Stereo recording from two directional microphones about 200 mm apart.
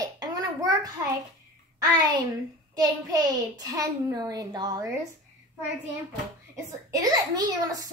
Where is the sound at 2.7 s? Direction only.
20° right (ahead or behind).